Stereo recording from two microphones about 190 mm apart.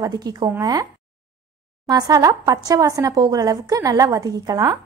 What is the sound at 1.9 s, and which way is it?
A woman's voice, 20° right (ahead or behind).